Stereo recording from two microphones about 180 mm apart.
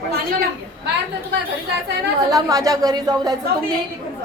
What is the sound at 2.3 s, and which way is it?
A woman's voice, 20° right (ahead or behind).